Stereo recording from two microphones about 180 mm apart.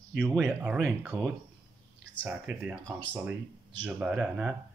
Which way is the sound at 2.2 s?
10° right (ahead or behind).